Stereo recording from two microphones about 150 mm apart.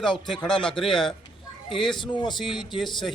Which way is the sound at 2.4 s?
30° left (ahead or behind).